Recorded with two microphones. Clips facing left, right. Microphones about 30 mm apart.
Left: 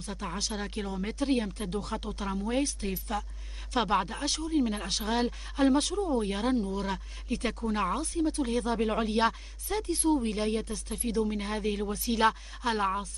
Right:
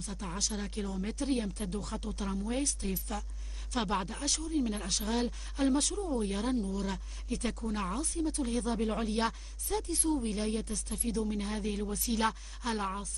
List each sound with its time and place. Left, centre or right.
0.0 s speech: left